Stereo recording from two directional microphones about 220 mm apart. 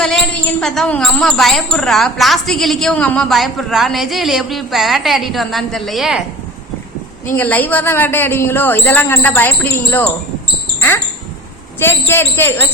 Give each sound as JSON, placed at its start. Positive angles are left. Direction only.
{"t": 0.6, "sound": "a woman's voice", "side_deg": 5}
{"t": 7.3, "sound": "a man's voice", "side_deg": 10}
{"t": 11.8, "sound": "a man's voice", "side_deg": 10}